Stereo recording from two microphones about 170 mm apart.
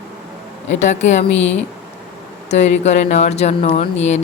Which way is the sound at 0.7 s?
45° left (ahead or behind).